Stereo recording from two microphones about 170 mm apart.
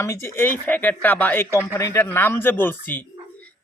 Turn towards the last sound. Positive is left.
turn(degrees=10)  # may be behind; listen again after turning